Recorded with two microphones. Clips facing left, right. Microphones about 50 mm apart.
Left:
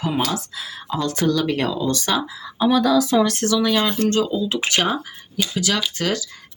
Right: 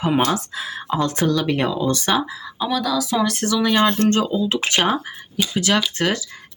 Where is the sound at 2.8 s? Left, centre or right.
Centre.